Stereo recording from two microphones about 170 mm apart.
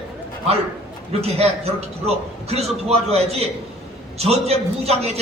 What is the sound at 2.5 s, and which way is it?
A man's voice, 40° right (ahead or behind).